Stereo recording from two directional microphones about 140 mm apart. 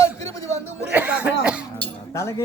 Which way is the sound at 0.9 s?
10° right (ahead or behind).